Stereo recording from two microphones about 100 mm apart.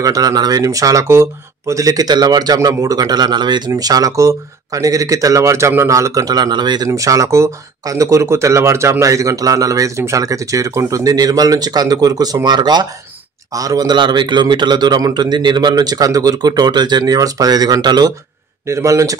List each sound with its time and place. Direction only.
0.0 s speech: 40° right (ahead or behind)
6.9 s a man's voice: 35° right (ahead or behind)
18.7 s speech: 30° right (ahead or behind)